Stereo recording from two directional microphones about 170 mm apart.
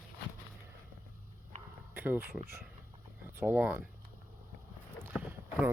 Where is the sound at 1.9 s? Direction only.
10° right (ahead or behind).